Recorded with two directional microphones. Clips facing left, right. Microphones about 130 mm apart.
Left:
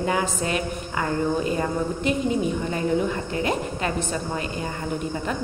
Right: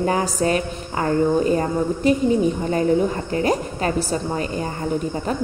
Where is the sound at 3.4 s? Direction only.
35° right (ahead or behind).